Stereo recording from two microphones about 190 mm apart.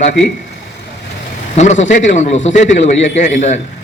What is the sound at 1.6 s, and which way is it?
A man's voice, 40° left (ahead or behind).